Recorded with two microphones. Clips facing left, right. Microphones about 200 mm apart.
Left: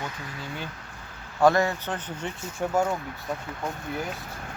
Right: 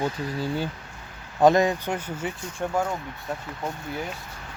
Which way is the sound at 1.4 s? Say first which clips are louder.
Right 3 dB; 15° right (ahead or behind).